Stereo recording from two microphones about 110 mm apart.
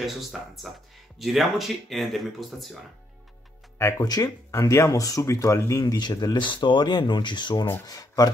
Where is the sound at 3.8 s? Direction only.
30° left (ahead or behind).